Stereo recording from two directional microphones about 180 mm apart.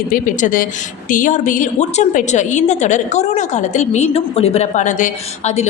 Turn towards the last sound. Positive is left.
turn(degrees=40)  # may be behind; listen again after turning